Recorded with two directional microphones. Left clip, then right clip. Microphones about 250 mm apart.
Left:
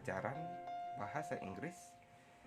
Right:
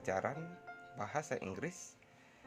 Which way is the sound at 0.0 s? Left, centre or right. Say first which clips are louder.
Right 4 dB; right.